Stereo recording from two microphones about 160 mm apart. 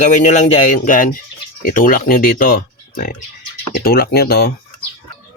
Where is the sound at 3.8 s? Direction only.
70° left (ahead or behind).